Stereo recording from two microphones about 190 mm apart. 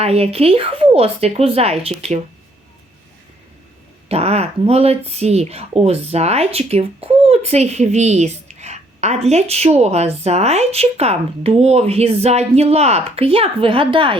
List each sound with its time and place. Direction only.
0.0 s speech: 35° right (ahead or behind)
4.1 s speech: 35° right (ahead or behind)